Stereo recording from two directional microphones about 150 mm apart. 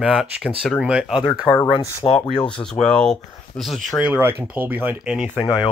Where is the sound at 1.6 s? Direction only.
35° left (ahead or behind).